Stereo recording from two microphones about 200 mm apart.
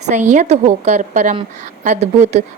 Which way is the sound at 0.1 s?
40° right (ahead or behind).